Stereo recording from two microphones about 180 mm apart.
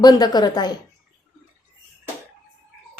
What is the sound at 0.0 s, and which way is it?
Speech, 20° left (ahead or behind).